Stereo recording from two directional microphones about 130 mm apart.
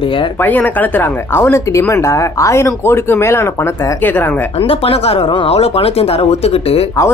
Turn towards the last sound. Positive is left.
turn(degrees=50)  # may be behind; listen again after turning